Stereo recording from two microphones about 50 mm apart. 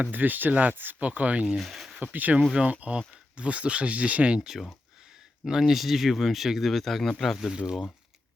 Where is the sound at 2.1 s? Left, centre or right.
Right.